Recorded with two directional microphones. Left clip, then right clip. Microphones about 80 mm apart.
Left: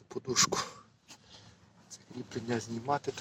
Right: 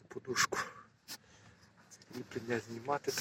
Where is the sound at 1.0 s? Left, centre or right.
Left.